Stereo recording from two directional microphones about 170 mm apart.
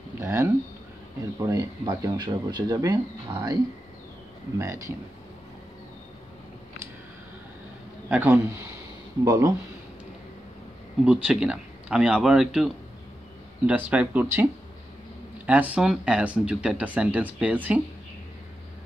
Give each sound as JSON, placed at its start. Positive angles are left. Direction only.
{"t": 0.2, "sound": "a sound", "side_deg": -15}
{"t": 1.4, "sound": "speech", "side_deg": -20}
{"t": 4.6, "sound": "speech", "side_deg": -20}
{"t": 8.1, "sound": "speech", "side_deg": -10}
{"t": 11.1, "sound": "a man's voice", "side_deg": -5}